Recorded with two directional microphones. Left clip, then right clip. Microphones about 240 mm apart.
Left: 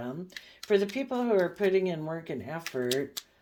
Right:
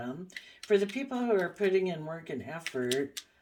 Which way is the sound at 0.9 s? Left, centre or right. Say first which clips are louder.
Left 3 dB; left.